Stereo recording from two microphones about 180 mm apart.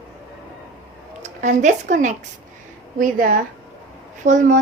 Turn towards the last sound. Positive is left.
turn(degrees=-45)  # may be behind; listen again after turning